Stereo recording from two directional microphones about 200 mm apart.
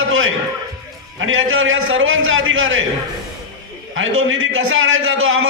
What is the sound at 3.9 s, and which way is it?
A man's voice, 80° right.